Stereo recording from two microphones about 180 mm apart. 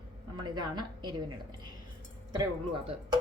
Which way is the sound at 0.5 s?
25° right (ahead or behind).